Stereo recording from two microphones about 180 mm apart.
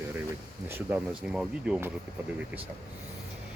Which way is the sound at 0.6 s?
10° right (ahead or behind).